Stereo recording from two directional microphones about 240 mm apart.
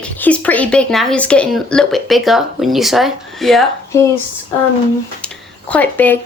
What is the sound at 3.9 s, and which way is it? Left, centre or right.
Speech, centre.